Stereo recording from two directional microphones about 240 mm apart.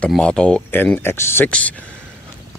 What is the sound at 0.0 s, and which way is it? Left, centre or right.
Speech, centre.